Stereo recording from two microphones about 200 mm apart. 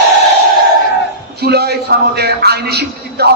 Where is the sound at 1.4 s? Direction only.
55° right (ahead or behind).